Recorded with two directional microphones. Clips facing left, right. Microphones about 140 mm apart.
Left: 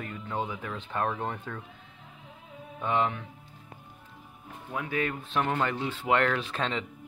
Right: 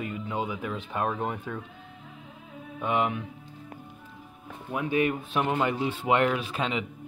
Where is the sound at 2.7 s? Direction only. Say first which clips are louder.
Right 1 dB; 15° right (ahead or behind).